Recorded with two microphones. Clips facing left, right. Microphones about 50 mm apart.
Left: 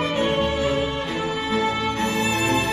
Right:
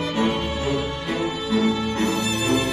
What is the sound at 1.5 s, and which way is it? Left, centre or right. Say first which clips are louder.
Music: right 2 dB; left.